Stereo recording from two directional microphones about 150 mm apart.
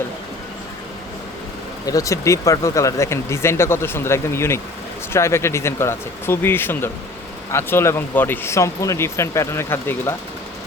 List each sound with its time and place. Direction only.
1.9 s speech: 20° left (ahead or behind)